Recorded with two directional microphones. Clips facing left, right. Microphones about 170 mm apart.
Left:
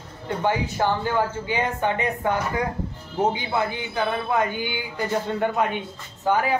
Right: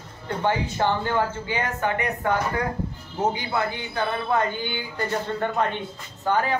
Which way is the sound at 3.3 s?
20° left (ahead or behind).